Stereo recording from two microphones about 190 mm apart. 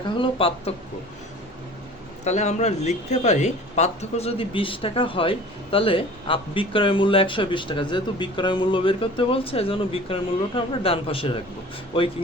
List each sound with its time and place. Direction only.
0.2 s speech: 30° left (ahead or behind)
2.2 s speech: 35° left (ahead or behind)